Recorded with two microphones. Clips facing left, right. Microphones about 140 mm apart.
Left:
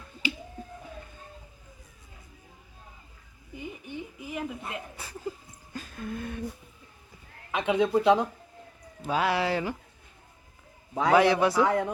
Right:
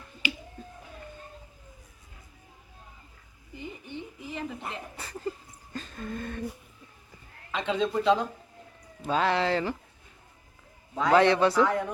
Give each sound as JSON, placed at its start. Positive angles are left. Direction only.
{"t": 3.6, "sound": "a sound", "side_deg": 10}
{"t": 7.5, "sound": "a man's voice", "side_deg": 15}
{"t": 10.9, "sound": "a man's voice", "side_deg": 15}